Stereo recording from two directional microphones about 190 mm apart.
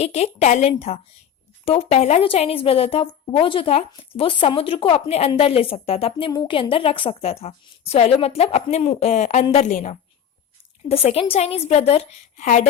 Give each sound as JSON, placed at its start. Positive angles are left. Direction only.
{"t": 0.0, "sound": "a woman's voice", "side_deg": 35}